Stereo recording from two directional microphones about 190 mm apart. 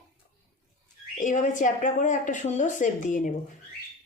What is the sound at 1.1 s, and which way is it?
A woman's voice, 40° left (ahead or behind).